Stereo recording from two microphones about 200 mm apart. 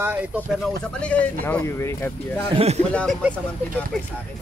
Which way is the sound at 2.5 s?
30° right (ahead or behind).